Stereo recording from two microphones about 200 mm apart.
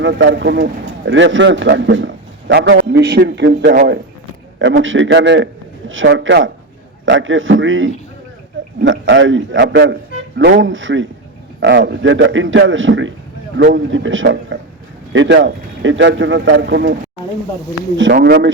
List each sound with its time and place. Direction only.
0.0 s a man's voice: 65° right (ahead or behind)
4.8 s a man's voice: 75° right (ahead or behind); by 18.5 s 55° right (ahead or behind)